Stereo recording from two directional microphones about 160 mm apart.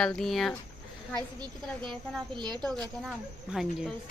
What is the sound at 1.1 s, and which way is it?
A woman's voice, 30° right (ahead or behind).